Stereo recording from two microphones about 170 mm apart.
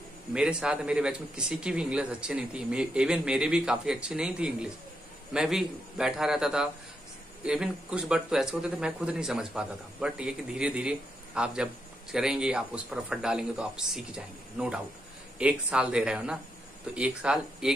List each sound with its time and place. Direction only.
0.3 s speech: 5° right (ahead or behind)